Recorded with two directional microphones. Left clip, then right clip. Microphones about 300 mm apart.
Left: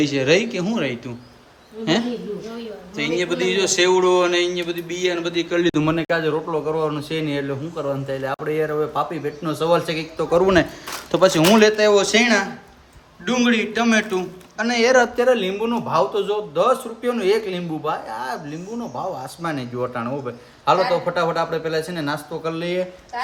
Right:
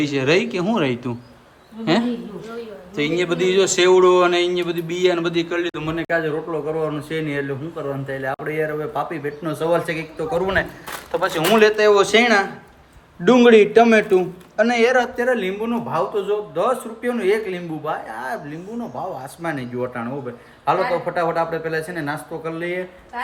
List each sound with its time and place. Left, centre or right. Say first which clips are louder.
0.0 s a man's voice: left 1 dB; centre
5.7 s a man's voice: left 5 dB; left
6.2 s a man's voice: left 2 dB; centre
10.3 s a man's voice: left 5 dB; left; by 18.3 s centre
19.4 s a man's voice: right 1 dB; centre